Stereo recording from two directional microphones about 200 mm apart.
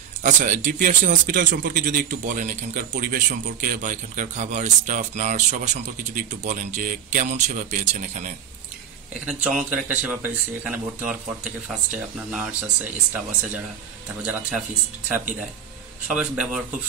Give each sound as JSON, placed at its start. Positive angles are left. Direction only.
{"t": 0.2, "sound": "speech", "side_deg": -40}
{"t": 9.2, "sound": "speech", "side_deg": -5}
{"t": 16.1, "sound": "speech", "side_deg": -5}